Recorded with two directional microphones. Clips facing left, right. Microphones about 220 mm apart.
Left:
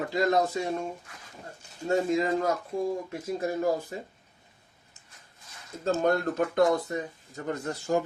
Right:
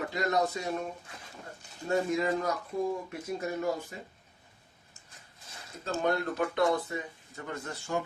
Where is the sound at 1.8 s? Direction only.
25° left (ahead or behind).